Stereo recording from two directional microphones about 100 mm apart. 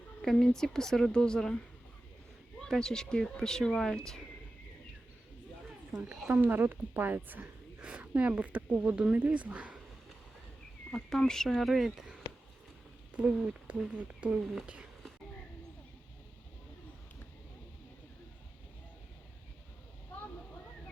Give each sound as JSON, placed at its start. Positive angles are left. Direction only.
{"t": 0.2, "sound": "speech", "side_deg": 5}
{"t": 5.9, "sound": "speech", "side_deg": 0}
{"t": 6.2, "sound": "speech", "side_deg": -15}
{"t": 10.9, "sound": "speech", "side_deg": 5}